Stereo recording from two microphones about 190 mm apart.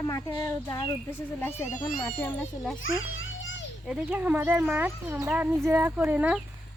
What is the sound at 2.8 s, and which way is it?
Children playing, 90° left.